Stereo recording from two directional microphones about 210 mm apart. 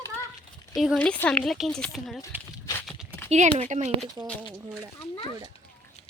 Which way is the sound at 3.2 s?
30° right (ahead or behind).